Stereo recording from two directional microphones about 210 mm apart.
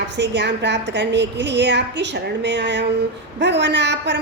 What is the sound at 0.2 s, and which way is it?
A woman's voice, 55° right (ahead or behind).